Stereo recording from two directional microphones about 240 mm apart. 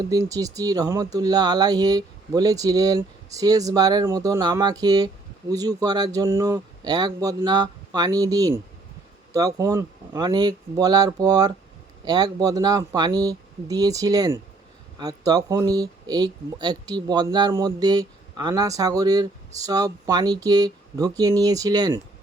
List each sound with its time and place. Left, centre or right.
0.0 s speech: centre